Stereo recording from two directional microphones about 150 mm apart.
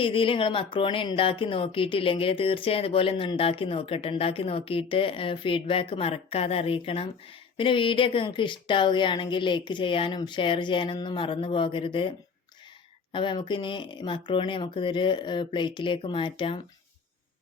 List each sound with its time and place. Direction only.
0.0 s speech: 35° left (ahead or behind)
13.1 s speech: 30° left (ahead or behind)